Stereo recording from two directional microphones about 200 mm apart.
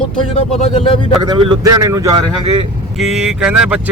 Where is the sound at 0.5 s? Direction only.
25° left (ahead or behind).